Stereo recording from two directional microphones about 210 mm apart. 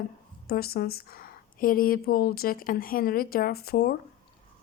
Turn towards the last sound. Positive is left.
turn(degrees=45)  # may be behind; listen again after turning